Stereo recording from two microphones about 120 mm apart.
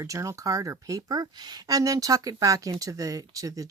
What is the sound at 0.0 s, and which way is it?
Speech, 25° right (ahead or behind).